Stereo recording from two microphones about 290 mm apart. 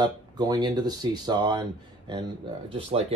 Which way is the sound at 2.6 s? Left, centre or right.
Centre.